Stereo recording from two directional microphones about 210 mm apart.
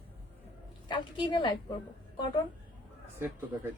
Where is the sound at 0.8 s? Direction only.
20° left (ahead or behind).